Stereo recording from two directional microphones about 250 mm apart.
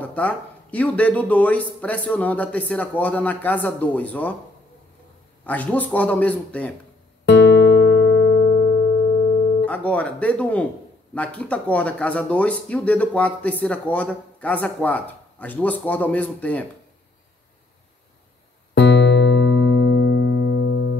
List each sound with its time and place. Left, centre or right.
0.0 s speech: centre
5.4 s speech: centre
7.2 s music: left
9.7 s speech: centre
18.8 s music: left